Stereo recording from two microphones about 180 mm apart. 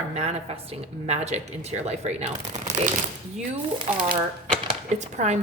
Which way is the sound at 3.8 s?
25° right (ahead or behind).